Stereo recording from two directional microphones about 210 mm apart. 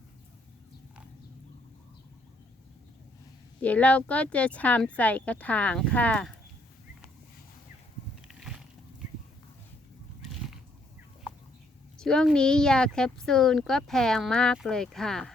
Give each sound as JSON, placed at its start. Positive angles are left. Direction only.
{"t": 3.6, "sound": "speech", "side_deg": 5}
{"t": 8.3, "sound": "a sound", "side_deg": -5}
{"t": 11.9, "sound": "speech", "side_deg": 5}